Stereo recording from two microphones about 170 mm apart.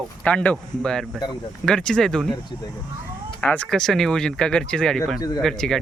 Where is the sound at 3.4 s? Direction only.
10° left (ahead or behind).